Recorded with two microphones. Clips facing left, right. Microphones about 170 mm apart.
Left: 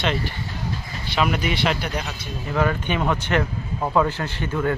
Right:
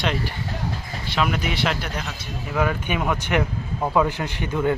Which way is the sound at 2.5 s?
5° right (ahead or behind).